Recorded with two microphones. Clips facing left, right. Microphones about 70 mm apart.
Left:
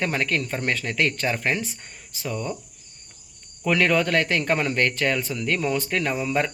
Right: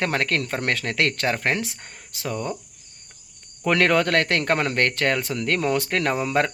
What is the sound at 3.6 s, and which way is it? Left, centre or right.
A man's voice, right.